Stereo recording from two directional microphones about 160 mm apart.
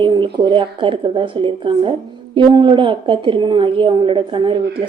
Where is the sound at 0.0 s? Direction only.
30° right (ahead or behind).